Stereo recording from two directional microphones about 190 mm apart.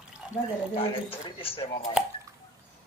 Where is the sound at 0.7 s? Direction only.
30° left (ahead or behind).